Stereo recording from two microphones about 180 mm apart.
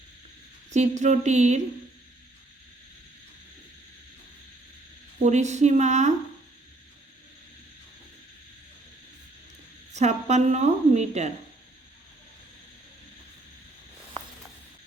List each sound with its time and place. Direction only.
0.7 s a woman's voice: 40° right (ahead or behind)
5.2 s a woman's voice: 40° right (ahead or behind)
9.9 s a woman's voice: 40° right (ahead or behind)